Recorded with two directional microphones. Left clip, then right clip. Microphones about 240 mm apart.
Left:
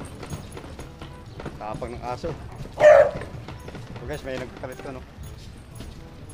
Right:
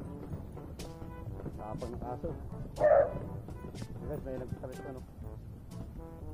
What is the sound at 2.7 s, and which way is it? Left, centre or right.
Bow-wow, left.